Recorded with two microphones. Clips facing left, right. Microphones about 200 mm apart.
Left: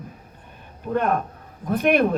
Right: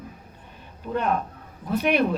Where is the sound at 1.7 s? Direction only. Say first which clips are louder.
Left 3 dB; 50° left (ahead or behind).